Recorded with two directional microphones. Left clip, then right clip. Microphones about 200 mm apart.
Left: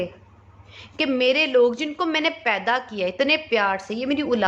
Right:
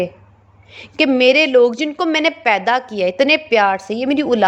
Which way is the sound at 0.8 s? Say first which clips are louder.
Right 8 dB; 35° right (ahead or behind).